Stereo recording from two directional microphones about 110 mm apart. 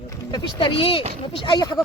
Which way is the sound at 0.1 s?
45° left (ahead or behind).